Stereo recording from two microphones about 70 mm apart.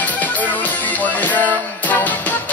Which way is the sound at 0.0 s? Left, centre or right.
Left.